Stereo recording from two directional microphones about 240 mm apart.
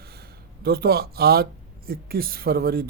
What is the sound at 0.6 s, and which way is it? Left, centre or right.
Speech, right.